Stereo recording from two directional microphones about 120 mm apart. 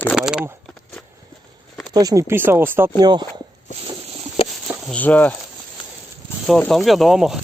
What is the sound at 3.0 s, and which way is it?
Speech, 35° right (ahead or behind).